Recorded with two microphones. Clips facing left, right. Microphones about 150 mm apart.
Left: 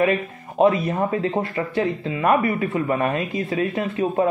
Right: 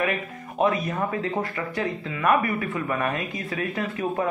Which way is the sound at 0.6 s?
30° left (ahead or behind).